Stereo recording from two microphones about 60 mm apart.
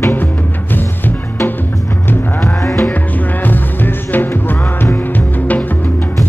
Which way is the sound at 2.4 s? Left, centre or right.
Left.